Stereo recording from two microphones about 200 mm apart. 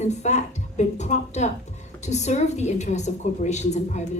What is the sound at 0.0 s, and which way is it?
A woman's voice, 35° left (ahead or behind).